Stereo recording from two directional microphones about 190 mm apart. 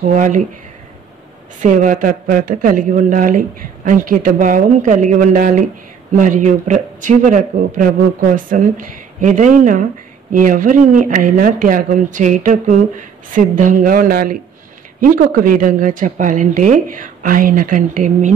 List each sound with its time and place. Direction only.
0.0 s a man's voice: 40° right (ahead or behind)
1.6 s a man's voice: 40° right (ahead or behind)